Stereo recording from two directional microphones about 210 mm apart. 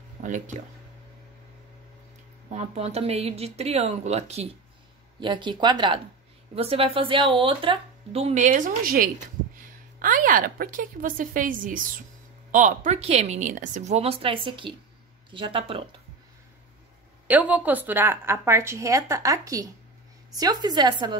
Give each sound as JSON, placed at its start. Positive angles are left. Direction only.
{"t": 0.2, "sound": "speech", "side_deg": -35}
{"t": 2.5, "sound": "a woman's voice", "side_deg": -30}
{"t": 17.3, "sound": "a woman's voice", "side_deg": -5}